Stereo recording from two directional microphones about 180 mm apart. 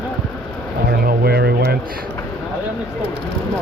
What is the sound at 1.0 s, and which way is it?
Speech, 60° right (ahead or behind).